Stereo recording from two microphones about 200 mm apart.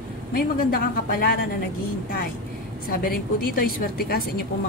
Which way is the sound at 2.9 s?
50° left (ahead or behind).